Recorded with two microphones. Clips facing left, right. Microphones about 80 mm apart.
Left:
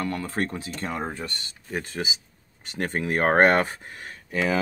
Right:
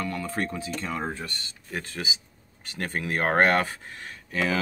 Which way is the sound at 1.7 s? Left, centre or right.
Left.